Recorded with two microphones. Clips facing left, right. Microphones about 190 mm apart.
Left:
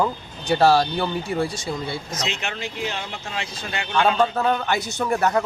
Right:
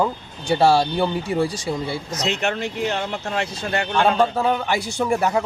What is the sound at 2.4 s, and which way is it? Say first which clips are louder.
Speech: right 6 dB; 55° right (ahead or behind).